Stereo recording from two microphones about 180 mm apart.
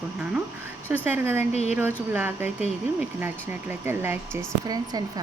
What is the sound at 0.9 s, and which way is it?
Speech, 10° right (ahead or behind).